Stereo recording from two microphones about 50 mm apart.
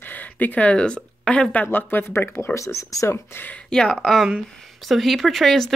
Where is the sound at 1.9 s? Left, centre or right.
Left.